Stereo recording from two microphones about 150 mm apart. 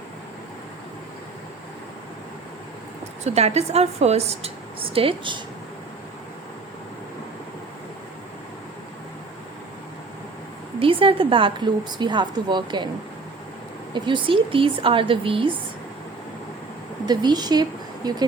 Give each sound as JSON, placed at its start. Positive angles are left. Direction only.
{"t": 3.2, "sound": "a woman's voice", "side_deg": -45}
{"t": 10.8, "sound": "a woman's voice", "side_deg": -35}
{"t": 13.9, "sound": "a woman's voice", "side_deg": -30}
{"t": 17.1, "sound": "speech", "side_deg": -25}